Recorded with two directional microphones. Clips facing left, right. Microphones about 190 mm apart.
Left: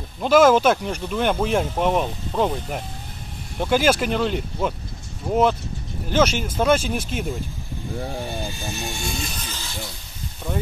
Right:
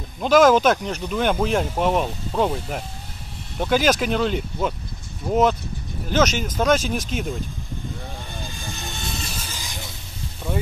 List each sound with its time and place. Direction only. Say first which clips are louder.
0.2 s speech: even; 5° left (ahead or behind)
8.4 s vehicle: left 5 dB; 15° left (ahead or behind)
9.0 s vehicle: left 2 dB; centre (ahead or behind)